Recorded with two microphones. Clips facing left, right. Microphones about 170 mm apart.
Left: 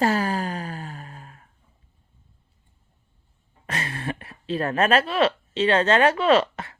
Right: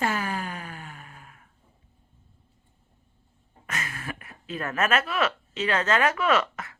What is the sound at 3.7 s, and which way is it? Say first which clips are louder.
Speech: left 5 dB; 30° left (ahead or behind).